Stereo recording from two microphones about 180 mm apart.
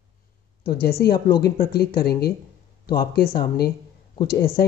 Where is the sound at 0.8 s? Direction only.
60° left (ahead or behind).